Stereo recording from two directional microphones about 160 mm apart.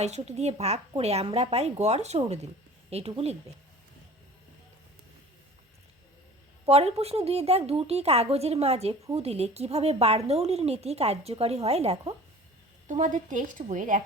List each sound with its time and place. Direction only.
0.0 s a woman's voice: 45° right (ahead or behind)
6.7 s a woman's voice: 40° right (ahead or behind)
12.9 s speech: 50° right (ahead or behind)